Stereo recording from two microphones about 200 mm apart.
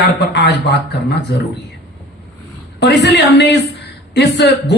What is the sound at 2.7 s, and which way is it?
Speech, 60° left (ahead or behind).